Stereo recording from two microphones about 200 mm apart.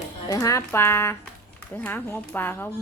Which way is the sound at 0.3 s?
15° left (ahead or behind).